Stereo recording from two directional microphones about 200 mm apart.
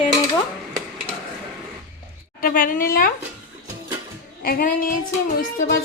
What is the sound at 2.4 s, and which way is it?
Speech, 45° left (ahead or behind).